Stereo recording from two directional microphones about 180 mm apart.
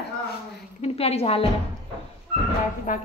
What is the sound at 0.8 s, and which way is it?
Speech, 35° left (ahead or behind).